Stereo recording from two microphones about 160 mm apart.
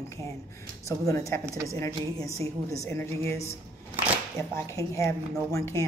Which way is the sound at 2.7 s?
15° left (ahead or behind).